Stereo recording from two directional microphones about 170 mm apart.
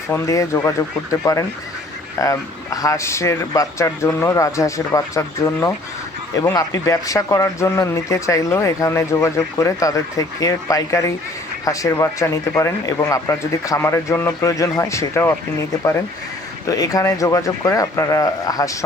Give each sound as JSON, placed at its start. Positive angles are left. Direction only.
{"t": 0.1, "sound": "speech", "side_deg": 15}
{"t": 16.6, "sound": "speech", "side_deg": 20}